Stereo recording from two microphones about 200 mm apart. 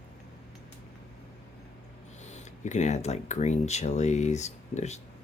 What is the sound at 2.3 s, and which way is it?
Speech, 35° left (ahead or behind).